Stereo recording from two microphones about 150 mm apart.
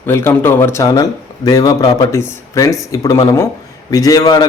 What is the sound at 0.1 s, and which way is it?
Speech, 15° left (ahead or behind).